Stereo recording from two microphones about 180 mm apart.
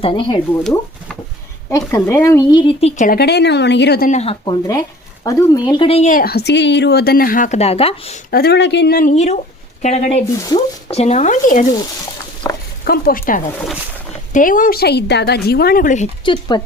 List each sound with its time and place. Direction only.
0.0 s speech: 25° left (ahead or behind)
1.9 s speech: 15° left (ahead or behind)
3.0 s speech: 55° left (ahead or behind)
4.1 s speech: 35° left (ahead or behind)
5.2 s speech: 20° left (ahead or behind)
8.3 s speech: 65° left (ahead or behind)
9.1 s speech: 35° left (ahead or behind)
10.4 s speech: 25° left (ahead or behind)
10.9 s speech: 40° left (ahead or behind)
12.4 s a sound: 15° left (ahead or behind)
12.8 s speech: 55° left (ahead or behind)
16.2 s speech: 25° left (ahead or behind)